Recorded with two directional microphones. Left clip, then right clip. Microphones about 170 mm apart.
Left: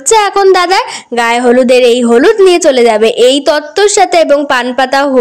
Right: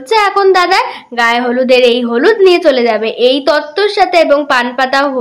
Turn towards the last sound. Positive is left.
turn(degrees=45)  # may be behind; listen again after turning